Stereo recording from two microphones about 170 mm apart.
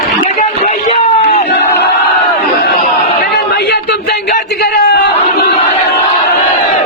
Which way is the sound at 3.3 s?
75° left (ahead or behind).